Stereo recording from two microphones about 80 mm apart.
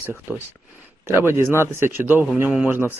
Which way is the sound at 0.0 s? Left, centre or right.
Right.